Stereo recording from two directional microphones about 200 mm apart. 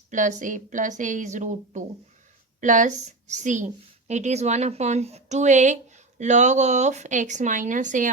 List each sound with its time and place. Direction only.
0.1 s speech: 40° right (ahead or behind)